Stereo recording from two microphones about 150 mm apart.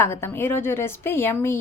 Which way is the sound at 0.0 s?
15° left (ahead or behind).